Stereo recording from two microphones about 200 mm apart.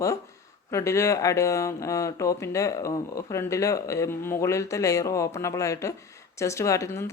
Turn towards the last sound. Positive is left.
turn(degrees=15)  # may be behind; listen again after turning